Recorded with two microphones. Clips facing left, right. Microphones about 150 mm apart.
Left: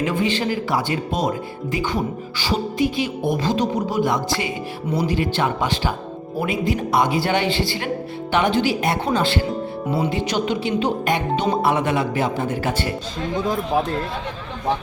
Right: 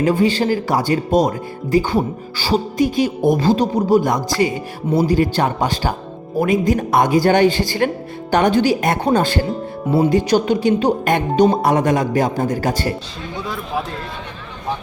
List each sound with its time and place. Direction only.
0.0 s speech: 35° right (ahead or behind)